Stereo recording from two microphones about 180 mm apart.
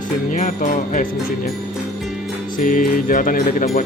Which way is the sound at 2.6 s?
50° left (ahead or behind).